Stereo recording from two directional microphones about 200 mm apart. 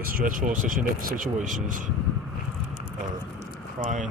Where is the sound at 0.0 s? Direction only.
45° right (ahead or behind).